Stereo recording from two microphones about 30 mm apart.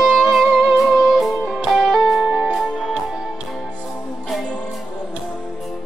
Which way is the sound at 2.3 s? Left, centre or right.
Right.